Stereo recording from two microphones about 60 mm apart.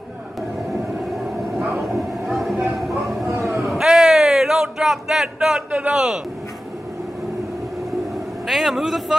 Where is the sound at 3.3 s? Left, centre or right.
Right.